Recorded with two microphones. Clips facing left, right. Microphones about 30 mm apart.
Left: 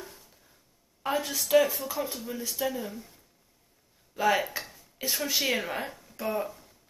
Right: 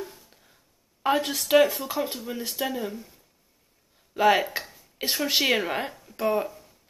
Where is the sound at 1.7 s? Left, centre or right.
Right.